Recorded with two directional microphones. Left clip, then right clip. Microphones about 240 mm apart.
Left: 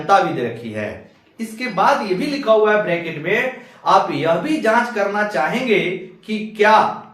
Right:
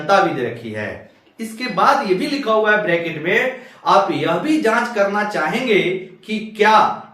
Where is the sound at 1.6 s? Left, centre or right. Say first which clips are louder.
Right 1 dB; centre.